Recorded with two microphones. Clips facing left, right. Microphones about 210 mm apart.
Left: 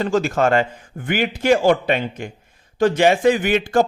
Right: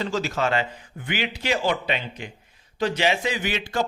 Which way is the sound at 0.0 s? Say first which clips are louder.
Left 7 dB; 50° left (ahead or behind).